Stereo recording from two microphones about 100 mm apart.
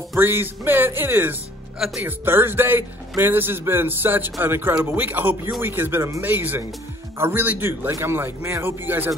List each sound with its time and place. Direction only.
0.1 s a man's voice: 20° right (ahead or behind)